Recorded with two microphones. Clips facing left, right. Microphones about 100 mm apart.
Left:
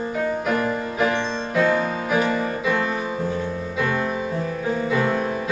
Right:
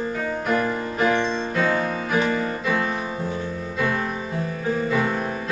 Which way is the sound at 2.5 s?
Centre (ahead or behind).